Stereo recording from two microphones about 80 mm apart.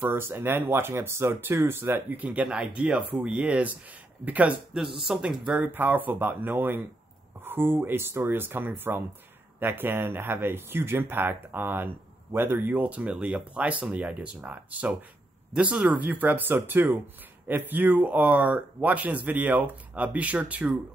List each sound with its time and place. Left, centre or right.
0.0 s speech: right
4.9 s speech: centre
5.6 s speech: right